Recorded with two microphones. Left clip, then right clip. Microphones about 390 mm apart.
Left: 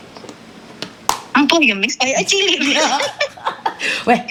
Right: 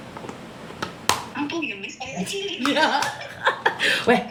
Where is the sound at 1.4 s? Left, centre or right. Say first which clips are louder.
Left 15 dB; left.